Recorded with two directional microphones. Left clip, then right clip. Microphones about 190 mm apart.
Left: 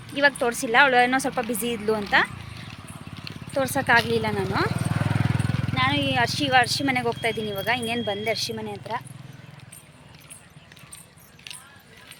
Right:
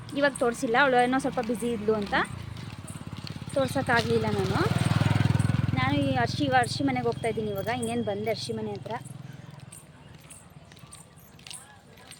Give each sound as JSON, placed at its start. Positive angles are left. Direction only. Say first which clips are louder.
{"t": 0.2, "sound": "speech", "louder": "left 4 dB", "side_deg": 0}
{"t": 3.6, "sound": "speech", "louder": "left 5 dB", "side_deg": 0}
{"t": 4.9, "sound": "vehicle", "louder": "left 1 dB", "side_deg": 35}
{"t": 5.7, "sound": "speech", "louder": "left 5 dB", "side_deg": -5}